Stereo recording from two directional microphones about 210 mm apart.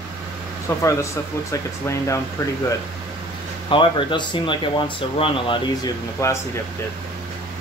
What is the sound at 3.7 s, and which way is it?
Speech, 25° left (ahead or behind).